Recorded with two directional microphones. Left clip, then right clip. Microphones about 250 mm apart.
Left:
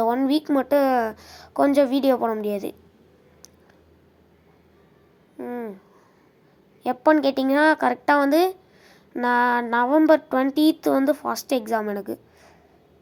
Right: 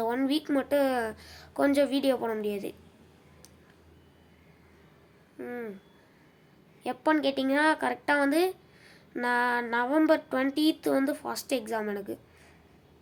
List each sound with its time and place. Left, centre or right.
0.0 s a woman's voice: centre
5.4 s a woman's voice: centre
6.8 s a woman's voice: centre